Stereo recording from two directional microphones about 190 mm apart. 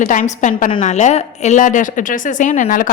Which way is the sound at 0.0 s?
40° left (ahead or behind).